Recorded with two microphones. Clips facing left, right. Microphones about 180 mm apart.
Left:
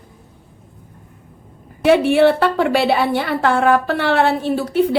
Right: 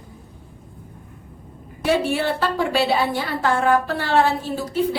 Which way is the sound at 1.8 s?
65° left (ahead or behind).